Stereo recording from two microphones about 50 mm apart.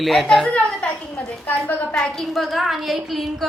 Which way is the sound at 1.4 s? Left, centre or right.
Left.